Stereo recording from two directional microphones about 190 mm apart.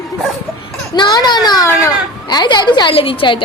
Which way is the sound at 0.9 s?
20° left (ahead or behind).